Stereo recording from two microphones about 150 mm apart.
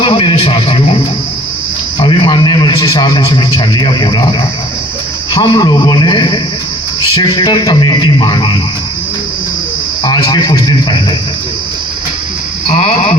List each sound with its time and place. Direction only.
0.0 s a man's voice: 35° left (ahead or behind)
2.0 s a man's voice: 35° left (ahead or behind)
10.0 s a man's voice: 30° left (ahead or behind)
12.7 s a man's voice: 40° left (ahead or behind)